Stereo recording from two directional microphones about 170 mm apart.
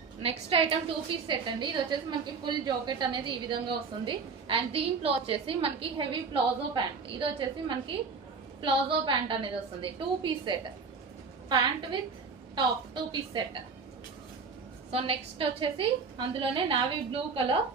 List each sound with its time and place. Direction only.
0.2 s a woman's voice: 30° right (ahead or behind)
14.9 s a woman's voice: 35° right (ahead or behind)